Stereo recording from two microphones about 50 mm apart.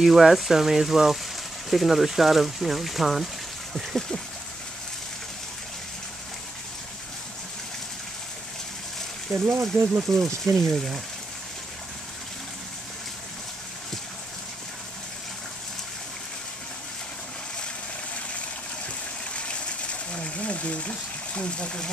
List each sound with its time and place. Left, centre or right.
0.0 s speech: centre
9.3 s speech: right
10.1 s speech: centre
19.3 s a sound: left